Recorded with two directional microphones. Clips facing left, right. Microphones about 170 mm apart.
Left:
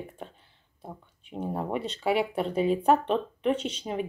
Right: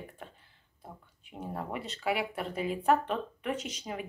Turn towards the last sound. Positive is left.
turn(degrees=30)  # may be behind; listen again after turning